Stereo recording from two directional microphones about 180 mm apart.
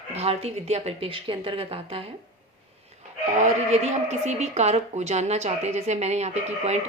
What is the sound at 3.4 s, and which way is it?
Speech, 40° right (ahead or behind).